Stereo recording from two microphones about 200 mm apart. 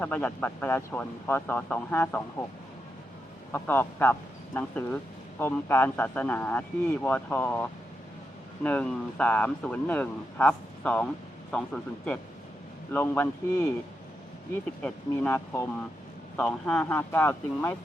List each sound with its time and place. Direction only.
0.0 s speech: 5° left (ahead or behind)
3.5 s speech: 10° left (ahead or behind)
14.8 s speech: 5° left (ahead or behind)